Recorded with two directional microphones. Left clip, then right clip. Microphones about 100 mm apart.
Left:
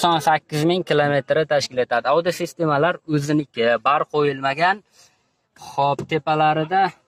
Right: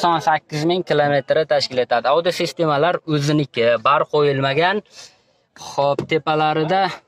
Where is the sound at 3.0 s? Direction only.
50° right (ahead or behind).